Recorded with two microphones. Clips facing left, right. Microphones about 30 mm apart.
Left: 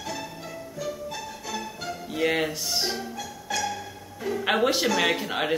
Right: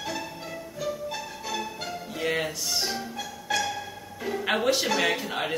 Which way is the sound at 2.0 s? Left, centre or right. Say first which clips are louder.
Left 4 dB; centre.